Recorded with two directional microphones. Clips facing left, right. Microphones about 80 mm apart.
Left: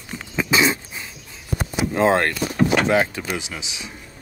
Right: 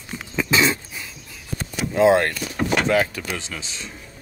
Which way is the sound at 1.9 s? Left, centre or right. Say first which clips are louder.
Right 2 dB; left.